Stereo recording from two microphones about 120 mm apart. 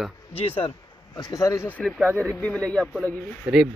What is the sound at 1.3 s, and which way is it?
Speech, 25° left (ahead or behind).